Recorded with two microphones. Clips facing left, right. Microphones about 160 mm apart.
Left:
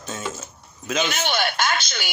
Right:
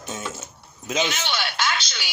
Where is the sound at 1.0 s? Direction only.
50° left (ahead or behind).